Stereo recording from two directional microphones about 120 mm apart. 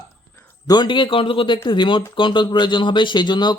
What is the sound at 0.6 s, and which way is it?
Speech, 35° left (ahead or behind).